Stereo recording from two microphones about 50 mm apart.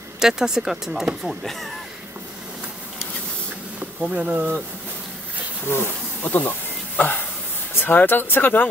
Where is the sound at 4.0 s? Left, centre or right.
Right.